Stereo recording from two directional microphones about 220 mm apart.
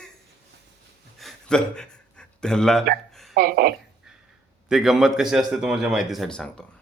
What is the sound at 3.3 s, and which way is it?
Speech, 45° right (ahead or behind).